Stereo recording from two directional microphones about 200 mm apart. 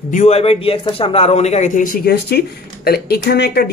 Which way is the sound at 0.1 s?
35° left (ahead or behind).